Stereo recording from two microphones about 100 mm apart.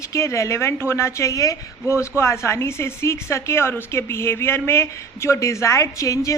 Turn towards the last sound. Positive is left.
turn(degrees=35)  # may be behind; listen again after turning